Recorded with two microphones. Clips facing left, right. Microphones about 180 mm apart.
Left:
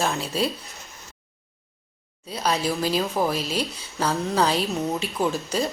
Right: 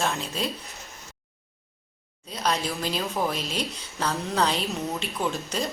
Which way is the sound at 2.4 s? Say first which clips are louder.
Left 3 dB; 5° left (ahead or behind).